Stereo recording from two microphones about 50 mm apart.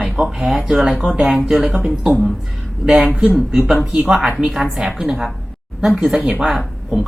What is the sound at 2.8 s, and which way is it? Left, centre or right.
Speech, centre.